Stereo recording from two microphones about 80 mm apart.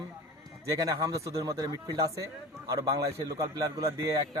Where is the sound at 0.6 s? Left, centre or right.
Right.